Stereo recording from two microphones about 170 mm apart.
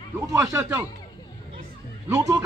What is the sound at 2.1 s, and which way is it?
Speech, 20° right (ahead or behind).